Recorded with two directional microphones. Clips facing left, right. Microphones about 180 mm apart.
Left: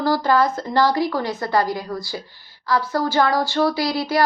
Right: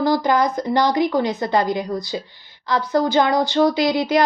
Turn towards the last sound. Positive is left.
turn(degrees=-20)  # may be behind; listen again after turning